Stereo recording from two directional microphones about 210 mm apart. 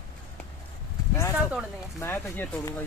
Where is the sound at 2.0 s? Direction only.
10° left (ahead or behind).